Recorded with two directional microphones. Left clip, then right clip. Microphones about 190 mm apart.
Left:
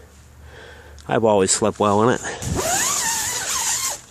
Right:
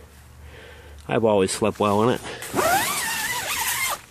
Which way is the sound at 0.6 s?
5° left (ahead or behind).